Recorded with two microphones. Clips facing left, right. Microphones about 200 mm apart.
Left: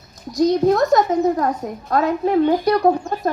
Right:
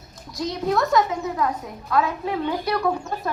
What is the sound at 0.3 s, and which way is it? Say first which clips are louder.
A child's voice: left 10 dB; 45° left (ahead or behind).